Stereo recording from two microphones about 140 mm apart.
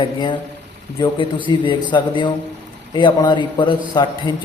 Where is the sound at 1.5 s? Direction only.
35° left (ahead or behind).